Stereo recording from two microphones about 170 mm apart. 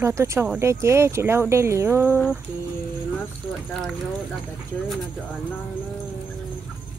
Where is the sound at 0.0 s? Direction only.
15° right (ahead or behind).